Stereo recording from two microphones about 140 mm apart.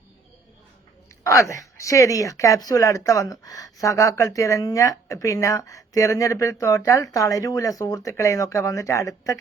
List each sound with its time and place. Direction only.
1.2 s speech: 25° left (ahead or behind)